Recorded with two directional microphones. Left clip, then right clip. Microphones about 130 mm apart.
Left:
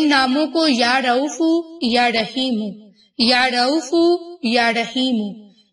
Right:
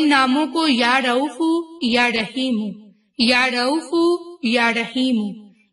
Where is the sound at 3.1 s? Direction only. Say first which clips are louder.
Left 1 dB; 15° right (ahead or behind).